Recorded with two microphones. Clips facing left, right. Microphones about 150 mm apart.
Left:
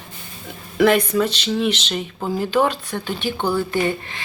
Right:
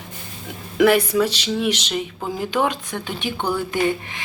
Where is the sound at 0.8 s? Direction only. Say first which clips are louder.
Even; 10° right (ahead or behind).